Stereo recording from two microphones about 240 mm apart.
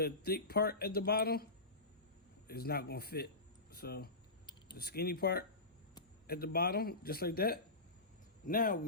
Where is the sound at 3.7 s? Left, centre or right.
Left.